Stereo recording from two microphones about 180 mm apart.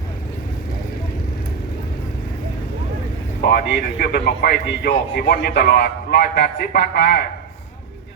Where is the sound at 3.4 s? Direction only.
60° left (ahead or behind).